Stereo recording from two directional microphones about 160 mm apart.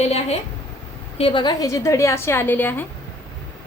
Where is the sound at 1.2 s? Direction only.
30° left (ahead or behind); by 2.8 s 10° left (ahead or behind).